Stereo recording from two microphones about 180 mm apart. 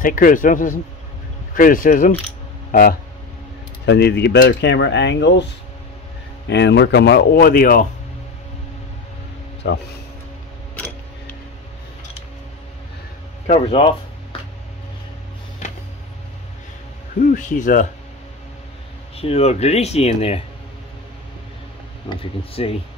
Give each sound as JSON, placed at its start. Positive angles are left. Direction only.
{"t": 0.0, "sound": "a man's voice", "side_deg": 50}
{"t": 3.8, "sound": "speech", "side_deg": 70}
{"t": 9.6, "sound": "speech", "side_deg": 70}
{"t": 13.5, "sound": "speech", "side_deg": 30}
{"t": 17.2, "sound": "a man's voice", "side_deg": 45}
{"t": 19.1, "sound": "speech", "side_deg": 35}
{"t": 22.2, "sound": "speech", "side_deg": 30}